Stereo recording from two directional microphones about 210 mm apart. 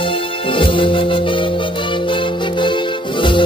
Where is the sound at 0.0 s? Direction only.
25° left (ahead or behind).